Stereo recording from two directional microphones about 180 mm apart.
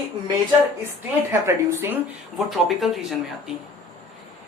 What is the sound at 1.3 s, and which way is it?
Speech, 15° right (ahead or behind).